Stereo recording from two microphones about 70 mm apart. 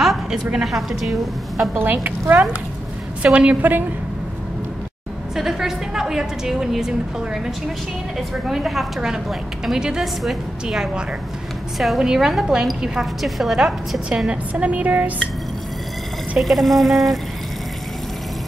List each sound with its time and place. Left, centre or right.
0.0 s a woman's voice: centre
2.0 s a woman's voice: right
5.3 s a woman's voice: centre
8.2 s a woman's voice: centre
14.0 s a woman's voice: centre
16.3 s a woman's voice: centre